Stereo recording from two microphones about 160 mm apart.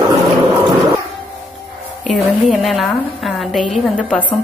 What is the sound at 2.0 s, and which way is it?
A woman's voice, centre (ahead or behind).